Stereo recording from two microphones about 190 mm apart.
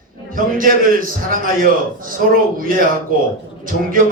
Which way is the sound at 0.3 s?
45° right (ahead or behind).